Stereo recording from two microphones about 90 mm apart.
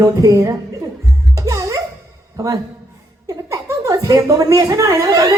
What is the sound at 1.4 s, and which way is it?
Music, 40° right (ahead or behind).